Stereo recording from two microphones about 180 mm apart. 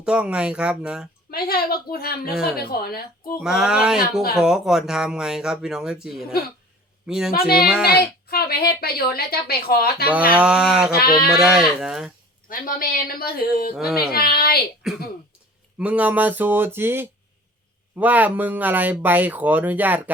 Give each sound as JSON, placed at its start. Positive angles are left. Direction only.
{"t": 0.0, "sound": "speech", "side_deg": -5}
{"t": 1.3, "sound": "a woman's voice", "side_deg": 60}
{"t": 3.4, "sound": "speech", "side_deg": 0}
{"t": 7.3, "sound": "a woman's voice", "side_deg": 55}
{"t": 7.6, "sound": "speech", "side_deg": -5}
{"t": 7.9, "sound": "a woman's voice", "side_deg": 60}
{"t": 10.3, "sound": "speech", "side_deg": -5}
{"t": 10.9, "sound": "a woman's voice", "side_deg": 55}
{"t": 11.3, "sound": "speech", "side_deg": -5}
{"t": 12.5, "sound": "a woman's voice", "side_deg": 50}
{"t": 13.7, "sound": "speech", "side_deg": 0}
{"t": 14.1, "sound": "a woman's voice", "side_deg": 60}
{"t": 15.8, "sound": "speech", "side_deg": -5}